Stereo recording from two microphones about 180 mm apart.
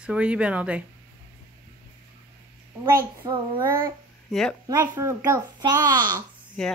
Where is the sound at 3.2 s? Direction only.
25° right (ahead or behind).